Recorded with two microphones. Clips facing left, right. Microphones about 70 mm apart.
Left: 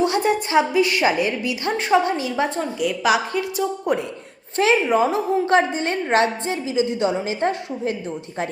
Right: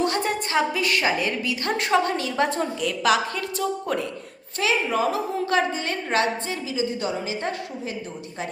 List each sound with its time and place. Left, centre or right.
0.1 s a woman's voice: centre
1.0 s a woman's voice: left
1.6 s a woman's voice: centre; by 7.9 s left